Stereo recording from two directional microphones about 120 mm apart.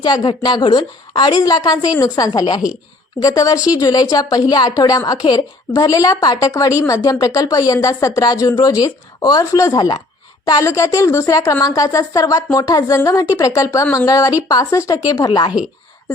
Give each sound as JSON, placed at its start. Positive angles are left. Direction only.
{"t": 0.0, "sound": "a woman's voice", "side_deg": 35}